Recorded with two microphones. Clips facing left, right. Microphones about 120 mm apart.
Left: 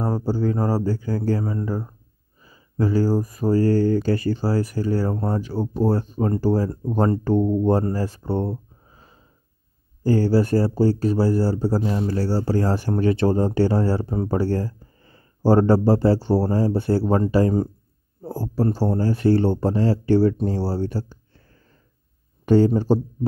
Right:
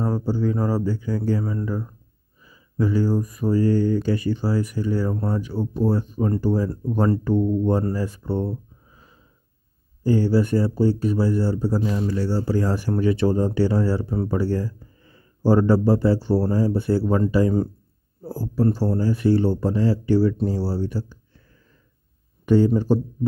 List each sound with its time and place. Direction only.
0.0 s speech: 30° left (ahead or behind)
15.6 s speech: 30° left (ahead or behind)
22.5 s speech: 30° left (ahead or behind)